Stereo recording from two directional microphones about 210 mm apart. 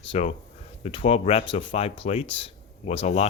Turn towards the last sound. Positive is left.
turn(degrees=30)  # may be behind; listen again after turning